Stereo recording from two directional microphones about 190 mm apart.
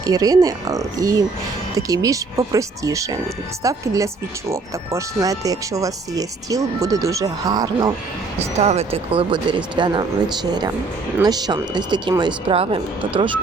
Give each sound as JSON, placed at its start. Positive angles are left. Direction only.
{"t": 0.0, "sound": "speech", "side_deg": -20}
{"t": 8.5, "sound": "speech", "side_deg": -35}